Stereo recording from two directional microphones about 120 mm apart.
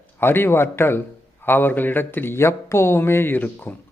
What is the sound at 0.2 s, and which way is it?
A man's voice, 20° left (ahead or behind).